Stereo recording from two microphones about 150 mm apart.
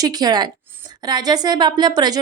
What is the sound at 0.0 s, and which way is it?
A woman's voice, 25° right (ahead or behind).